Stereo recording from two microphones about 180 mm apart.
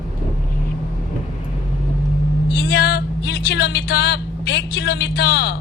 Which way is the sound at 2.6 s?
65° left (ahead or behind).